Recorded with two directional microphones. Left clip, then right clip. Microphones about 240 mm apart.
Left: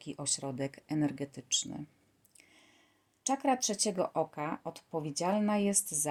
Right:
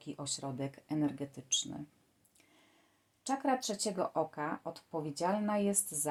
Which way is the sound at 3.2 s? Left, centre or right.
Left.